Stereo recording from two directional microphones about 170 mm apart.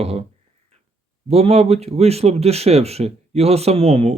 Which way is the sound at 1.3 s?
35° right (ahead or behind).